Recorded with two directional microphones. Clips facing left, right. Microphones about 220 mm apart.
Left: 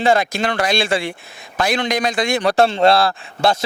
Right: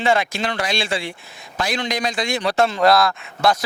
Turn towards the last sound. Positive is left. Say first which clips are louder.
# left 1 dB
turn(degrees=30)  # may be behind; listen again after turning